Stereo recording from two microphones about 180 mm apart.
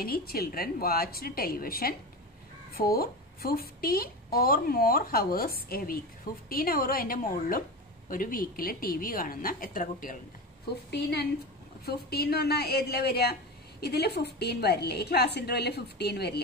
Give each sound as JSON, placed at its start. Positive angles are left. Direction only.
{"t": 0.0, "sound": "a woman's voice", "side_deg": 55}
{"t": 10.9, "sound": "speech", "side_deg": 65}